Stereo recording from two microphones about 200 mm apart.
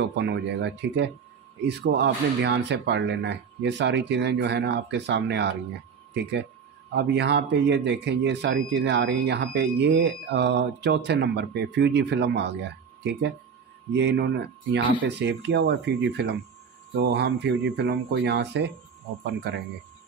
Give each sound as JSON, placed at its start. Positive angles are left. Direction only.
{"t": 0.0, "sound": "speech", "side_deg": -60}
{"t": 6.9, "sound": "speech", "side_deg": -60}